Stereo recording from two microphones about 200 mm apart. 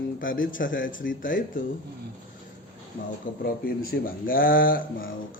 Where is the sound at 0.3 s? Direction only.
45° left (ahead or behind).